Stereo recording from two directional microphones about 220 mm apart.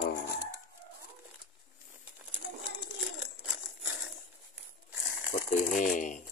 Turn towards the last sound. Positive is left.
turn(degrees=35)  # may be behind; listen again after turning